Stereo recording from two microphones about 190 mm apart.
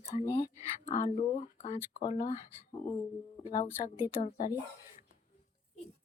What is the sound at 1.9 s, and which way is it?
Speech, 20° left (ahead or behind).